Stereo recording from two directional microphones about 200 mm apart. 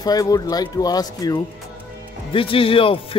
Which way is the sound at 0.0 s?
20° left (ahead or behind).